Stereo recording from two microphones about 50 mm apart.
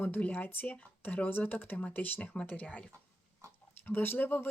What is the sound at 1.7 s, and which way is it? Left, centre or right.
Speech, left.